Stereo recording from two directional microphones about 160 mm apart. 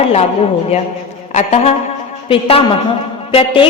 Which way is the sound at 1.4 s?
40° left (ahead or behind).